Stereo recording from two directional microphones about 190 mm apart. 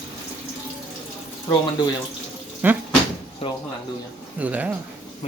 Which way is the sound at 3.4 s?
30° left (ahead or behind).